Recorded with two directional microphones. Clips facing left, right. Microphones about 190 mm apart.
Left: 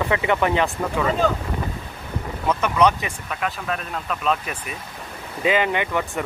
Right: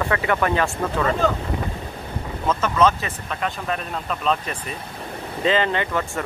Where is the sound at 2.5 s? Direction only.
15° left (ahead or behind).